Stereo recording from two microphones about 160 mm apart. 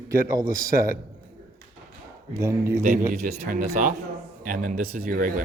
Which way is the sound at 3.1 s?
75° right (ahead or behind).